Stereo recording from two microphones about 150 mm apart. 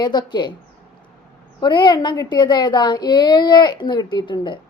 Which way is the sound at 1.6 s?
30° left (ahead or behind).